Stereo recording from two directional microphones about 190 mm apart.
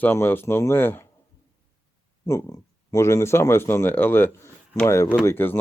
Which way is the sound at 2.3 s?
15° left (ahead or behind).